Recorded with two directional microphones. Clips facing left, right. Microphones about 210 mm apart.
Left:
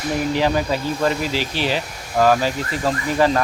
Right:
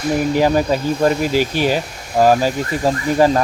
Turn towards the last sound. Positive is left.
turn(degrees=-35)  # may be behind; listen again after turning